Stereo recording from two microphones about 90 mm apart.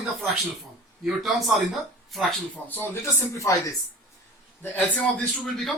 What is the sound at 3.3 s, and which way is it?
Speech, 35° left (ahead or behind).